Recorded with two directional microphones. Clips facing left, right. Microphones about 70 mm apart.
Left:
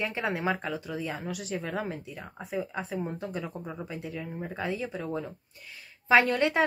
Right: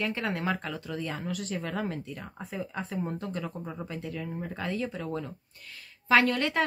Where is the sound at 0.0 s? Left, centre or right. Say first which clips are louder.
Left 1 dB; centre.